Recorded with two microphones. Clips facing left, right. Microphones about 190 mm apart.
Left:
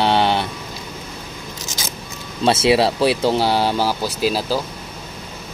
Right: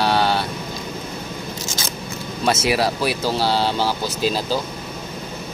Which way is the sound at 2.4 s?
30° left (ahead or behind).